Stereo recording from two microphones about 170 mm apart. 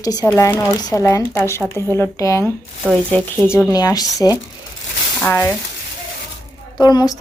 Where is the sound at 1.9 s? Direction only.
15° left (ahead or behind).